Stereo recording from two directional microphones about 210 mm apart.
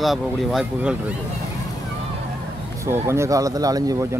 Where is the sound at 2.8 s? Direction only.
10° right (ahead or behind).